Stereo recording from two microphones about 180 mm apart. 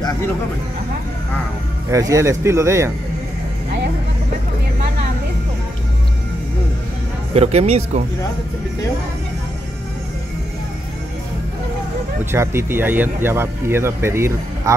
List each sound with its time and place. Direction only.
1.9 s speech: 20° right (ahead or behind)
7.3 s speech: 35° right (ahead or behind)
12.3 s speech: 15° right (ahead or behind)